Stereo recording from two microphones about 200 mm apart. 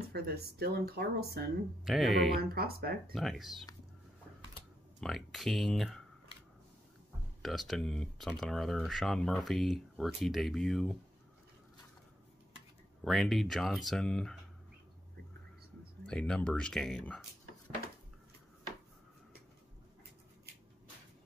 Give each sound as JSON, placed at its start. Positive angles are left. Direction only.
{"t": 0.1, "sound": "speech", "side_deg": -50}
{"t": 1.9, "sound": "speech", "side_deg": 0}
{"t": 2.5, "sound": "speech", "side_deg": -50}
{"t": 3.2, "sound": "speech", "side_deg": 0}
{"t": 5.0, "sound": "speech", "side_deg": 0}
{"t": 7.4, "sound": "speech", "side_deg": 0}
{"t": 13.0, "sound": "speech", "side_deg": 0}
{"t": 16.1, "sound": "speech", "side_deg": 5}